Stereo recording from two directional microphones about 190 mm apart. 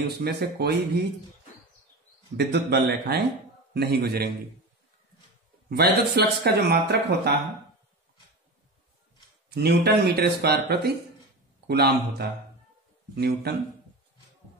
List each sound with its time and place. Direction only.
0.2 s speech: 55° right (ahead or behind)
2.3 s speech: 60° right (ahead or behind)
5.7 s speech: 55° right (ahead or behind)
9.5 s speech: 60° right (ahead or behind)